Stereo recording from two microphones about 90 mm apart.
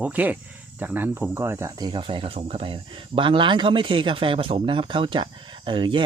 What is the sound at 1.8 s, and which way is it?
Speech, 65° right (ahead or behind).